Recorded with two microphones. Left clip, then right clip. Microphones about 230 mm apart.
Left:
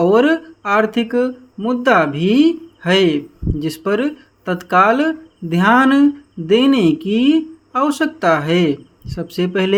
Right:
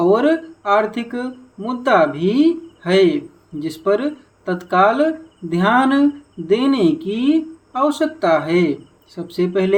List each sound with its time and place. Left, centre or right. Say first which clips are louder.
0.0 s speech: left 2 dB; left